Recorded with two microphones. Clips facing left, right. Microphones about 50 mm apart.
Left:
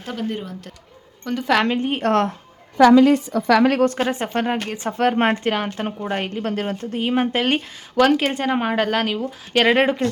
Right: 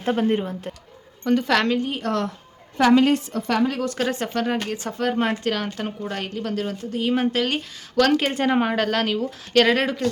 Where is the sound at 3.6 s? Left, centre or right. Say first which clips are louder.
Left 6 dB; left.